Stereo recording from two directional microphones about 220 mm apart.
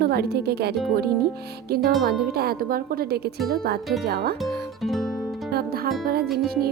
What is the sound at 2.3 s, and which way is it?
A woman's voice, 45° right (ahead or behind).